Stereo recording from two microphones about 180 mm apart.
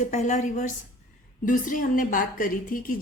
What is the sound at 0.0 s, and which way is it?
A woman's voice, 40° left (ahead or behind).